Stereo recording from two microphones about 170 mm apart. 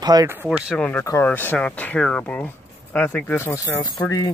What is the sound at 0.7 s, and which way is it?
Speech, 5° left (ahead or behind).